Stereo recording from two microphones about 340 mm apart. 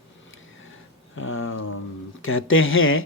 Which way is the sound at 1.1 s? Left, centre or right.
Left.